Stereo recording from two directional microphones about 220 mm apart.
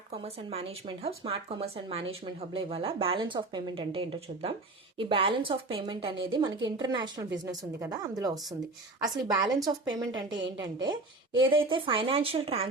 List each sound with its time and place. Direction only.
0.1 s a woman's voice: 25° right (ahead or behind)